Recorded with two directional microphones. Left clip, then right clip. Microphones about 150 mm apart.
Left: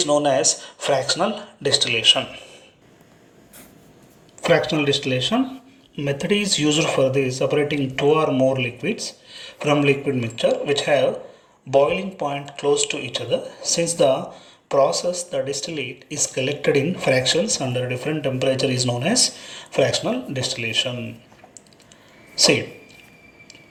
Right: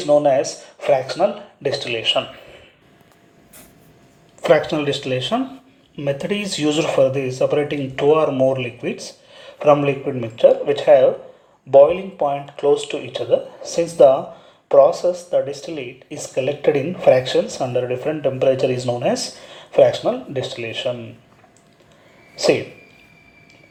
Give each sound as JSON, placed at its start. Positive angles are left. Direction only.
{"t": 0.0, "sound": "speech", "side_deg": -20}
{"t": 4.4, "sound": "speech", "side_deg": -15}
{"t": 22.4, "sound": "speech", "side_deg": -20}